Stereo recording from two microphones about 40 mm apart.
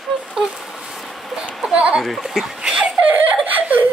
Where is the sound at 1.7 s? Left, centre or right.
Right.